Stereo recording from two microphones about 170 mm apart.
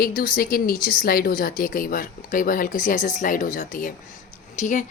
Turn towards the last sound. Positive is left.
turn(degrees=45)  # may be behind; listen again after turning